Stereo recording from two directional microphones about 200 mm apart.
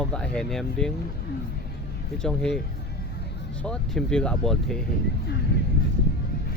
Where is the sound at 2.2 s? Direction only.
Centre (ahead or behind).